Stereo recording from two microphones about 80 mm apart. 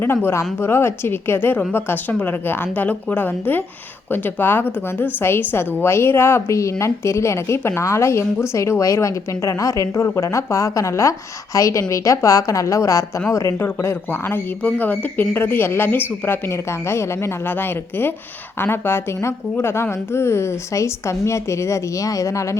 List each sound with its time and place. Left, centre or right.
0.0 s a woman's voice: left